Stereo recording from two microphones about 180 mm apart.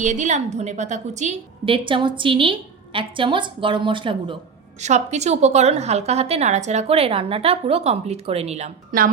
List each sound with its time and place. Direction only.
0.0 s a woman's voice: 40° right (ahead or behind)
4.8 s a woman's voice: 40° right (ahead or behind)